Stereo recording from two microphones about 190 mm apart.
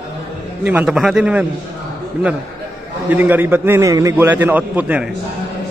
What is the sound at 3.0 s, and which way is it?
A man's voice, 10° right (ahead or behind).